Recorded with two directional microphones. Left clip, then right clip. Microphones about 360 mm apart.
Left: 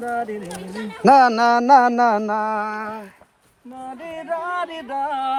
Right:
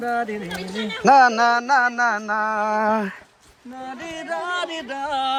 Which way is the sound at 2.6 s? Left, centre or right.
Centre.